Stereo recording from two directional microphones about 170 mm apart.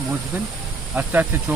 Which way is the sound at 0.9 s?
10° right (ahead or behind).